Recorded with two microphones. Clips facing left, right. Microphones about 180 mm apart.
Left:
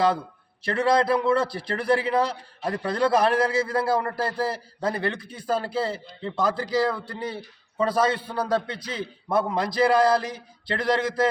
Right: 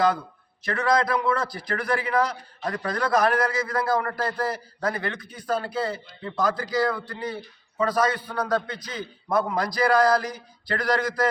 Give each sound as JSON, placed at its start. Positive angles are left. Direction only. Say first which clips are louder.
{"t": 0.6, "sound": "a man's voice", "louder": "left 2 dB", "side_deg": 30}